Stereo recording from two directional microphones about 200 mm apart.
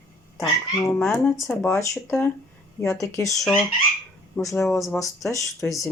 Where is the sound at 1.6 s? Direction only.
15° left (ahead or behind).